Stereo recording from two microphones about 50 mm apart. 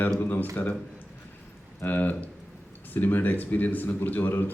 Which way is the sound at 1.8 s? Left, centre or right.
Left.